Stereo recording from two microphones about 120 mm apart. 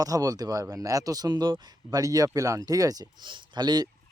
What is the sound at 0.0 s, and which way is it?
Speech, 30° right (ahead or behind).